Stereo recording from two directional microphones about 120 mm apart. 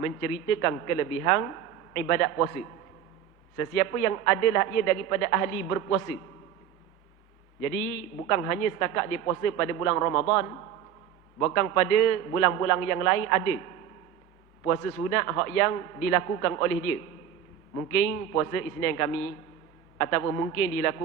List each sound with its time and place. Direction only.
0.0 s a man's voice: 25° left (ahead or behind)
3.8 s a man's voice: 20° left (ahead or behind)
8.3 s a man's voice: 25° left (ahead or behind)
14.6 s a man's voice: 25° left (ahead or behind)
17.7 s a man's voice: 20° left (ahead or behind)